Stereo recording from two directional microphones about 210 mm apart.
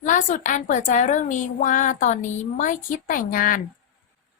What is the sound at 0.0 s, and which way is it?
A woman's voice, 40° left (ahead or behind).